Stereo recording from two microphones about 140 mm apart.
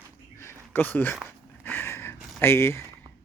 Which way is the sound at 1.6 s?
15° left (ahead or behind).